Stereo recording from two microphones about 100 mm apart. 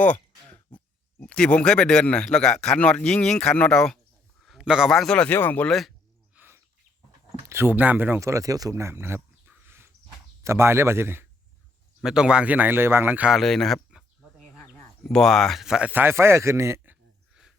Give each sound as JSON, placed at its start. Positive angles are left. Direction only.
{"t": 0.0, "sound": "a sound", "side_deg": 15}
{"t": 1.2, "sound": "speech", "side_deg": 10}
{"t": 4.4, "sound": "a man's voice", "side_deg": -5}
{"t": 5.3, "sound": "speech", "side_deg": 20}
{"t": 5.6, "sound": "speech", "side_deg": 0}
{"t": 6.3, "sound": "bird", "side_deg": -20}
{"t": 7.4, "sound": "speech", "side_deg": -25}
{"t": 9.6, "sound": "a sound", "side_deg": -25}
{"t": 10.4, "sound": "speech", "side_deg": -25}
{"t": 12.0, "sound": "speech", "side_deg": -10}
{"t": 13.3, "sound": "speech", "side_deg": 5}
{"t": 15.0, "sound": "speech", "side_deg": 5}
{"t": 15.9, "sound": "speech", "side_deg": -20}